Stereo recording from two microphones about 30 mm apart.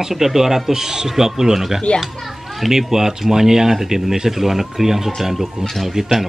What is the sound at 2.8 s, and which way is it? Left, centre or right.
Speech, centre.